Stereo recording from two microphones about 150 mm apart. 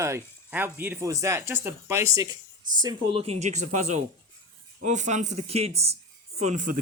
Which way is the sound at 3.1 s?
40° right (ahead or behind).